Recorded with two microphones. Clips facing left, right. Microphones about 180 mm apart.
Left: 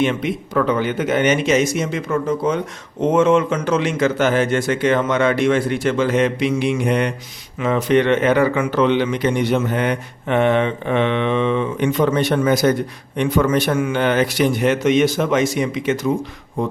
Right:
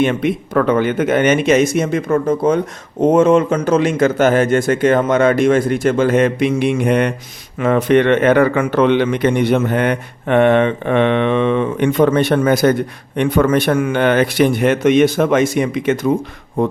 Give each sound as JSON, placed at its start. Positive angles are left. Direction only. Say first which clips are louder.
{"t": 0.0, "sound": "a man's voice", "louder": "right 4 dB", "side_deg": -55}